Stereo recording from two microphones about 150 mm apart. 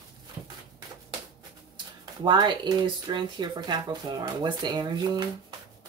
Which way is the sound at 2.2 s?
30° right (ahead or behind).